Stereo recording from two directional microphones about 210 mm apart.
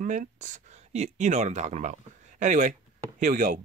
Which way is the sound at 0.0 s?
35° right (ahead or behind).